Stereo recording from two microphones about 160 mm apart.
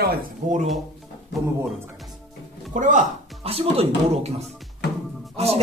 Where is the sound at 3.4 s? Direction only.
35° right (ahead or behind).